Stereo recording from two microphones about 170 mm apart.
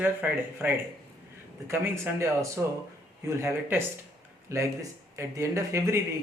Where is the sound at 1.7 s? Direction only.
15° right (ahead or behind).